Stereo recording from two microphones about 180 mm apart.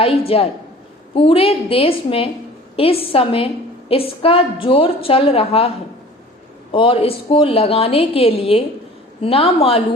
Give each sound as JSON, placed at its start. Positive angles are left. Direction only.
{"t": 0.3, "sound": "a woman's voice", "side_deg": 35}